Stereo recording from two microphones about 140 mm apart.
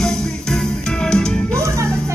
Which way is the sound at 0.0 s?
5° left (ahead or behind).